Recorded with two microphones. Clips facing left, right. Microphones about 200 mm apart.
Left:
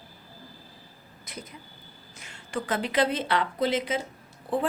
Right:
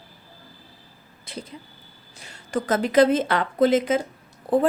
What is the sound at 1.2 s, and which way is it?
A woman's voice, 30° right (ahead or behind).